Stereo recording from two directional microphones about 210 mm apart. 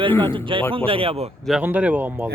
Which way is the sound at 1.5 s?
5° right (ahead or behind).